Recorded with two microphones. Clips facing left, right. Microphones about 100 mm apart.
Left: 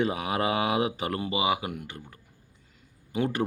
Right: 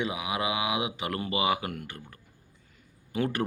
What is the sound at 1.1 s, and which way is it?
Speech, 25° left (ahead or behind).